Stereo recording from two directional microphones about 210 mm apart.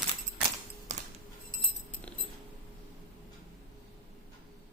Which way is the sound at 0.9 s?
35° right (ahead or behind).